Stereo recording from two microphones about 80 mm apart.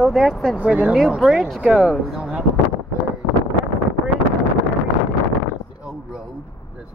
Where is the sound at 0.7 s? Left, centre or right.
Centre.